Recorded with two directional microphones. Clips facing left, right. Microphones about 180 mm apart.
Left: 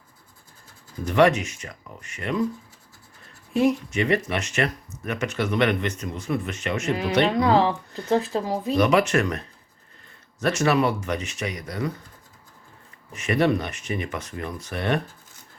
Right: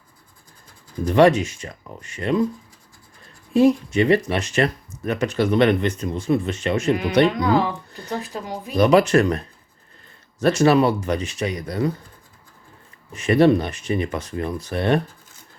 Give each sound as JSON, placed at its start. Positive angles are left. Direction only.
{"t": 1.0, "sound": "speech", "side_deg": -30}
{"t": 3.5, "sound": "speech", "side_deg": -30}
{"t": 7.3, "sound": "speech", "side_deg": 30}
{"t": 8.8, "sound": "speech", "side_deg": -35}
{"t": 10.4, "sound": "speech", "side_deg": -30}
{"t": 13.1, "sound": "speech", "side_deg": -30}